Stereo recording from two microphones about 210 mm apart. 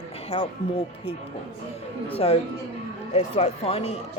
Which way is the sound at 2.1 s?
30° left (ahead or behind).